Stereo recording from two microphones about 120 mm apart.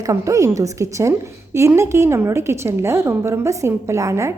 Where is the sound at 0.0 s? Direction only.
25° right (ahead or behind).